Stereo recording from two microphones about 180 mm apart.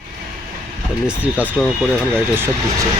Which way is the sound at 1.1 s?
5° right (ahead or behind).